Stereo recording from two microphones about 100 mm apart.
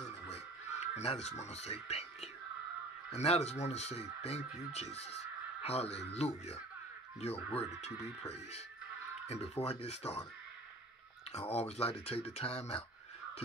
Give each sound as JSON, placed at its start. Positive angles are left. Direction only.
{"t": 0.9, "sound": "speech", "side_deg": 90}
{"t": 3.2, "sound": "speech", "side_deg": 90}
{"t": 11.3, "sound": "speech", "side_deg": 90}